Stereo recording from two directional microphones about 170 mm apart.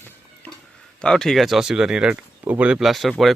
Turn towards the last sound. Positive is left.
turn(degrees=0)  # may be behind; listen again after turning